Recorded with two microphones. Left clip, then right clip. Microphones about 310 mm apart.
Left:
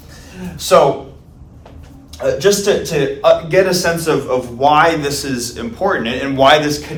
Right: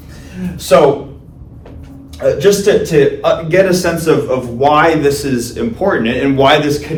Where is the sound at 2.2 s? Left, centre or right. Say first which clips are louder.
Right 3 dB; centre.